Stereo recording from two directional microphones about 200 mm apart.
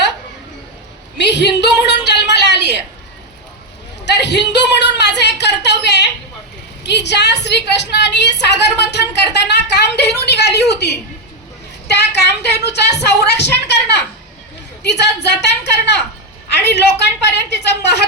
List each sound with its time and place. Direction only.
1.2 s a woman's voice: 60° left (ahead or behind)
2.0 s a sound: 60° left (ahead or behind)
4.0 s a woman's voice: 60° left (ahead or behind)